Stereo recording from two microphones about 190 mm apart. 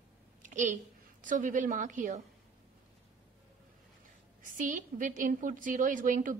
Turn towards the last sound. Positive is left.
turn(degrees=-45)  # may be behind; listen again after turning